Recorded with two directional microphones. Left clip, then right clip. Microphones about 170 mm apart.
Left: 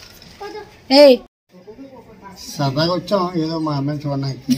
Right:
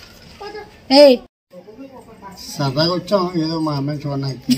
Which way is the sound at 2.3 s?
15° left (ahead or behind).